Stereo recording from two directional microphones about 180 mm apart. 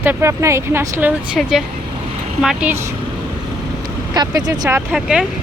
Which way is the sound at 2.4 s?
Centre (ahead or behind).